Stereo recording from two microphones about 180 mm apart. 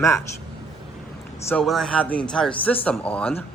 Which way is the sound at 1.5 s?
Centre (ahead or behind).